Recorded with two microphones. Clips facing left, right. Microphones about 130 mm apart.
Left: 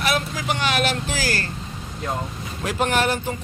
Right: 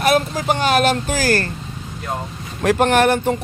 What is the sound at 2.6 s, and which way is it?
Speech, 60° right (ahead or behind).